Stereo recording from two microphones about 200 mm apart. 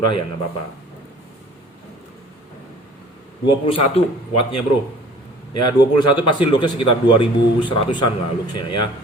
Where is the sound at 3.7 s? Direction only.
30° left (ahead or behind).